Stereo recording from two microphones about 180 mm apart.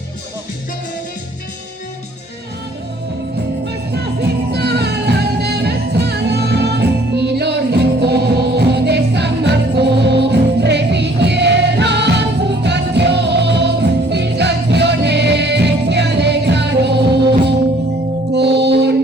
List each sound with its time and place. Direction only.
3.7 s music: 65° right (ahead or behind)
18.3 s music: 70° right (ahead or behind)